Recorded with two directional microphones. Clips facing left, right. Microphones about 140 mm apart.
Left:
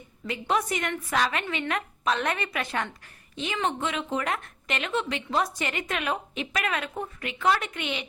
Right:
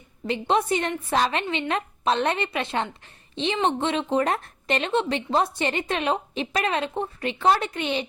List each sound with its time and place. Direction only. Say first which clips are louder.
0.3 s a woman's voice: right 5 dB; 30° right (ahead or behind)